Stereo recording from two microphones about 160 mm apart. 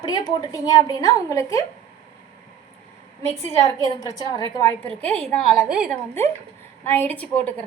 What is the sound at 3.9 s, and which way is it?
Speech, 25° left (ahead or behind).